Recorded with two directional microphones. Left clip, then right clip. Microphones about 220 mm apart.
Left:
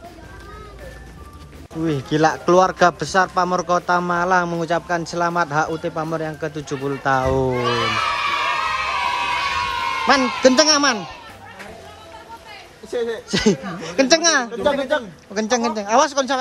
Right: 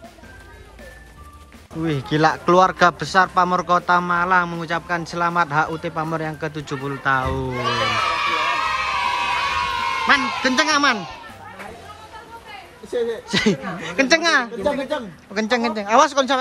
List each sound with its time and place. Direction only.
1.8 s speech: 15° left (ahead or behind)
7.4 s crowd: centre (ahead or behind)
10.4 s speech: 20° left (ahead or behind)
13.3 s speech: 15° left (ahead or behind)
14.6 s speech: centre (ahead or behind)
15.3 s speech: 15° left (ahead or behind)